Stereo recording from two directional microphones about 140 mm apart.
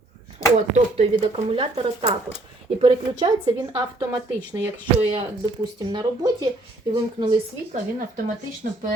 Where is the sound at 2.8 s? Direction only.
30° right (ahead or behind).